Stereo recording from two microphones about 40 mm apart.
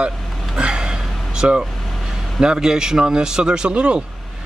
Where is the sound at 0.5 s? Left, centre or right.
Right.